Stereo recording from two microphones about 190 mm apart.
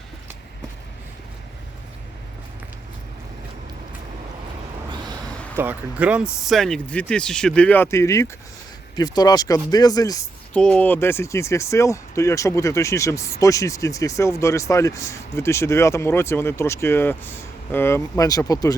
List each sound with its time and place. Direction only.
5.5 s speech: 10° right (ahead or behind); by 10.2 s 20° left (ahead or behind)
10.5 s speech: 5° left (ahead or behind)